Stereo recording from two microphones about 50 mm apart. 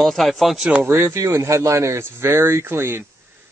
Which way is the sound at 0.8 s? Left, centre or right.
Right.